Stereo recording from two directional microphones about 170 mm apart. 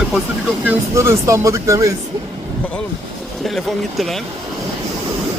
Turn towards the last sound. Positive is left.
turn(degrees=0)  # may be behind; listen again after turning